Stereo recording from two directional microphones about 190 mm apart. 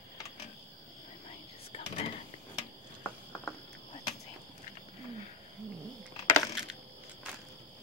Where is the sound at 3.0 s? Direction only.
10° left (ahead or behind).